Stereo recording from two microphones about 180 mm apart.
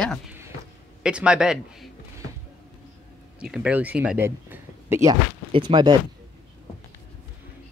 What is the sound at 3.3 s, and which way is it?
A man's voice, 5° right (ahead or behind).